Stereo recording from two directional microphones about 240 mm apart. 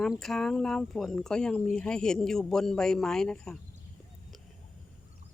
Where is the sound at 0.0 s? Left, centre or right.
Centre.